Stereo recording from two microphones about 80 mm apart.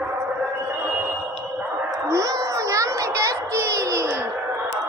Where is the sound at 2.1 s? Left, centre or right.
Right.